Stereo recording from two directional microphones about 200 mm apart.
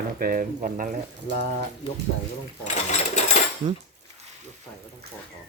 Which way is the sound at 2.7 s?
35° left (ahead or behind).